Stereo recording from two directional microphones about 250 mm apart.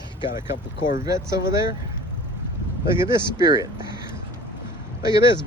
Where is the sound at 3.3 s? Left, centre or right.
Centre.